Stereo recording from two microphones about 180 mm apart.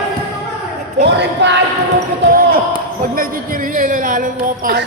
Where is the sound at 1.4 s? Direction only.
70° right (ahead or behind).